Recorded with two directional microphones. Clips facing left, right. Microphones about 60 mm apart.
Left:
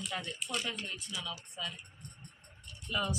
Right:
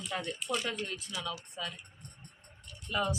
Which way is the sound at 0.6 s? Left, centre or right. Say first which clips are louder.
Right 3 dB; right.